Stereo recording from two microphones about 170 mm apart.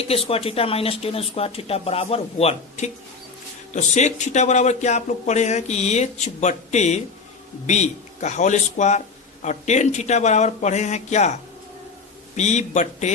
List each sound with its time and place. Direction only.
0.0 s speech: 35° left (ahead or behind)
12.4 s speech: 45° left (ahead or behind)